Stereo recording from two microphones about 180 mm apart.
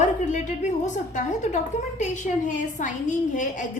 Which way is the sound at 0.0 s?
40° left (ahead or behind).